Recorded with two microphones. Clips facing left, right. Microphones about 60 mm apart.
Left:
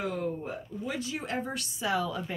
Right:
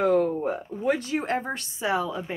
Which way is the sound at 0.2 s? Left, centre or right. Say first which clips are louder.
Right 8 dB; right.